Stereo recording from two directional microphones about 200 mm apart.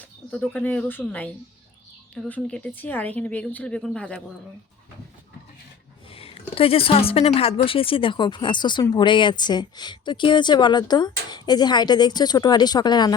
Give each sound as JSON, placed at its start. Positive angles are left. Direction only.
{"t": 0.3, "sound": "speech", "side_deg": 5}
{"t": 2.3, "sound": "speech", "side_deg": 5}
{"t": 6.1, "sound": "a woman's voice", "side_deg": 30}